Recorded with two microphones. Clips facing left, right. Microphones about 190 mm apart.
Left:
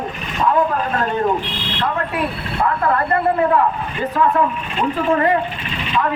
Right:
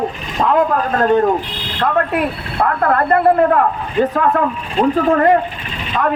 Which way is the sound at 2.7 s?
55° right (ahead or behind).